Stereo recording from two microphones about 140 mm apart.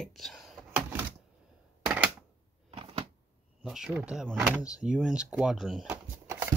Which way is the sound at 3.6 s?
5° right (ahead or behind).